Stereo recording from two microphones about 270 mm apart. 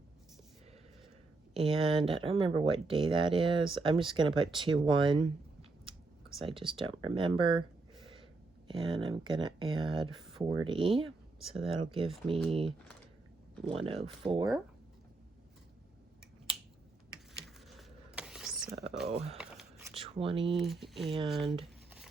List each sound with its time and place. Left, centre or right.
1.5 s speech: centre
6.6 s speech: centre
8.6 s speech: centre
11.3 s speech: centre
11.9 s speech: centre
13.8 s speech: right
17.7 s a sound: centre
19.0 s speech: right
19.9 s a sound: centre
20.5 s speech: centre
21.6 s a sound: centre